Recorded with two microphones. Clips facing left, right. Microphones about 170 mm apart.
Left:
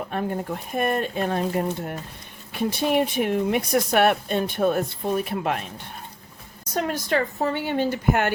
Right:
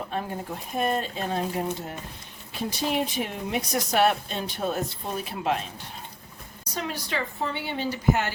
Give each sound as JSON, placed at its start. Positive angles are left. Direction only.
{"t": 0.1, "sound": "speech", "side_deg": 55}
{"t": 6.7, "sound": "a woman's voice", "side_deg": 50}